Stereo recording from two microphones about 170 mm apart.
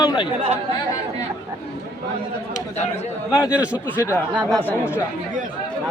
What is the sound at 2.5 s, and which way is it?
Speech, 40° left (ahead or behind).